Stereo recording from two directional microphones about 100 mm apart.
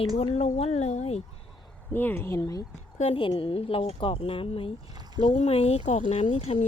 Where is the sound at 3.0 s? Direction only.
65° left (ahead or behind).